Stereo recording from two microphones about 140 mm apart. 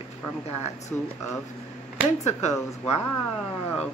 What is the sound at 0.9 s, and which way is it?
Speech, 15° left (ahead or behind).